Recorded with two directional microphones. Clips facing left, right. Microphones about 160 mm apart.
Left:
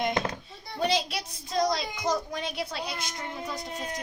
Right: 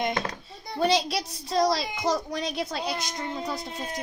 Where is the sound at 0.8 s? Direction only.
40° right (ahead or behind).